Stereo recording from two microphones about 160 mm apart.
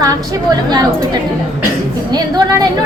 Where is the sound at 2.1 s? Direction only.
25° right (ahead or behind).